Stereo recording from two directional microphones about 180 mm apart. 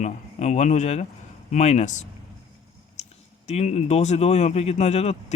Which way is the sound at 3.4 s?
35° left (ahead or behind).